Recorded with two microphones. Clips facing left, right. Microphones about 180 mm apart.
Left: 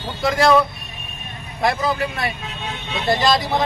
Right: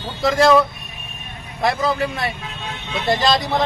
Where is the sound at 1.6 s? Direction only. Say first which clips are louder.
Right 1 dB; centre (ahead or behind).